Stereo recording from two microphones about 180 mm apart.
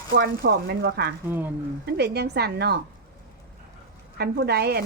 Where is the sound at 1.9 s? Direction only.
65° right (ahead or behind).